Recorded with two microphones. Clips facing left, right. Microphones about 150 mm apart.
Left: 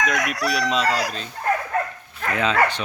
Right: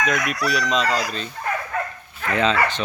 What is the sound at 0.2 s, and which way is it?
Chicken, 65° left (ahead or behind).